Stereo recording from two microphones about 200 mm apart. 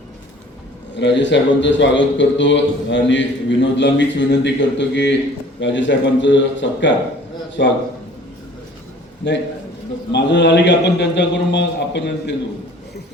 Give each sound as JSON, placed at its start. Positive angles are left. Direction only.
{"t": 0.9, "sound": "a man's voice", "side_deg": 60}
{"t": 9.2, "sound": "a man's voice", "side_deg": 65}